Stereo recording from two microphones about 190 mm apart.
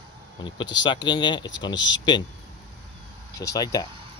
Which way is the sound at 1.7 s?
70° left (ahead or behind).